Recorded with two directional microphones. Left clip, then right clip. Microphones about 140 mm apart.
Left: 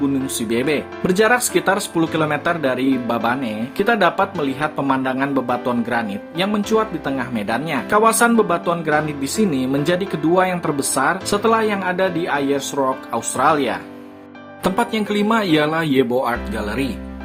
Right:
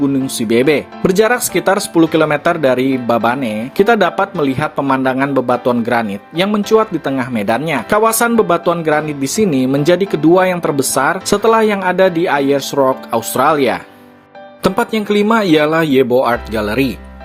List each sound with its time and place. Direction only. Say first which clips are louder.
0.3 s speech: right 10 dB; 50° right (ahead or behind)
14.6 s speech: right 4 dB; 40° right (ahead or behind)